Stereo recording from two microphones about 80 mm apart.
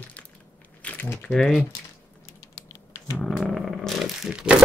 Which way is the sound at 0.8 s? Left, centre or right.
Centre.